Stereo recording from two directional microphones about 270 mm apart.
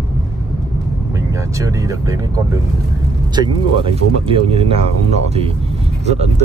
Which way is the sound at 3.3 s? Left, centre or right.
Centre.